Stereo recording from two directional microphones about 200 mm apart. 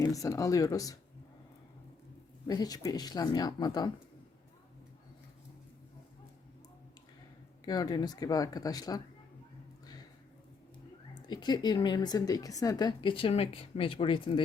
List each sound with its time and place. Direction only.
0.0 s speech: 15° left (ahead or behind)
2.5 s a woman's voice: 20° left (ahead or behind)
7.6 s a woman's voice: 20° left (ahead or behind)
11.3 s a woman's voice: 20° left (ahead or behind)